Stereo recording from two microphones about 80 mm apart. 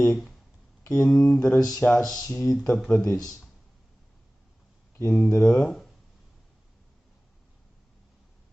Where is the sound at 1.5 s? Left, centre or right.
Centre.